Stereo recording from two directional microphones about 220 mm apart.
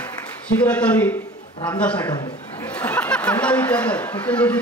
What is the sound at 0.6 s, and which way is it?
Speech, 5° left (ahead or behind).